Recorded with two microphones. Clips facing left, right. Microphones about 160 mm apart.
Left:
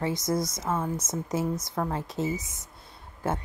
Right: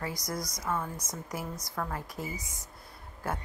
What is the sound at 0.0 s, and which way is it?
A woman's voice, 25° left (ahead or behind).